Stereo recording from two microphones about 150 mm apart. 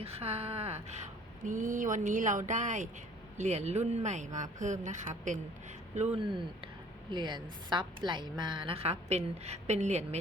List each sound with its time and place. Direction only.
0.0 s a woman's voice: 40° right (ahead or behind)
1.5 s speech: 60° right (ahead or behind)
7.1 s a woman's voice: 30° right (ahead or behind); by 10.2 s 50° right (ahead or behind)